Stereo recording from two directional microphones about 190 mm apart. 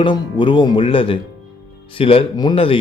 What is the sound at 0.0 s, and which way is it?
Speech, 25° left (ahead or behind).